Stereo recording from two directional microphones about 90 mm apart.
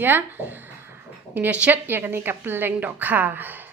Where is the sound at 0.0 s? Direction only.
25° right (ahead or behind).